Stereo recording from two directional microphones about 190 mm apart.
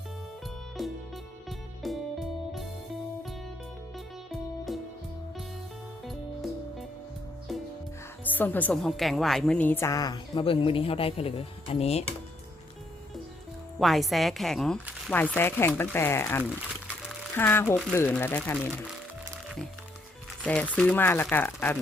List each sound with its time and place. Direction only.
0.8 s music: centre (ahead or behind)
3.9 s music: centre (ahead or behind)
6.1 s music: centre (ahead or behind)
8.2 s a woman's voice: 10° left (ahead or behind); by 12.0 s 35° left (ahead or behind)
13.7 s a woman's voice: centre (ahead or behind)
20.4 s a woman's voice: 5° left (ahead or behind)